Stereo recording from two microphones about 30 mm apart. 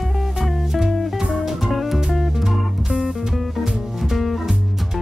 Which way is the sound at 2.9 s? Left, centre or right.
Centre.